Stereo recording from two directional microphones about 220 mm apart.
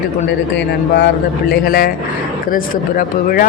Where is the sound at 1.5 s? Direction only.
40° left (ahead or behind).